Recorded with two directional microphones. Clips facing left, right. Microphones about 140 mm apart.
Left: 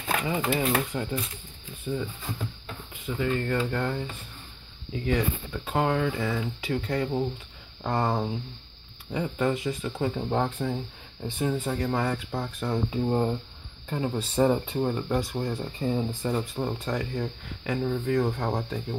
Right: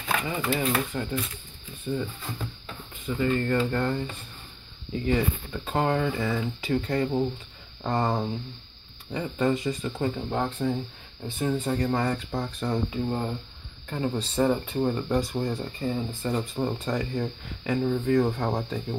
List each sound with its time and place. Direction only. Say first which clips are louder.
0.9 s speech: even; 15° left (ahead or behind)
1.9 s speech: right 1 dB; 5° left (ahead or behind)
11.2 s speech: even; 15° left (ahead or behind)
11.5 s speech: right 2 dB; 5° left (ahead or behind)
12.9 s speech: left 3 dB; 20° left (ahead or behind)
13.8 s speech: even; 10° left (ahead or behind)
16.3 s speech: right 1 dB; centre (ahead or behind)